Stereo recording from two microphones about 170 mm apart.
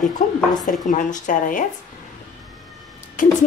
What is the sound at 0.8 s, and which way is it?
Speech, 50° left (ahead or behind).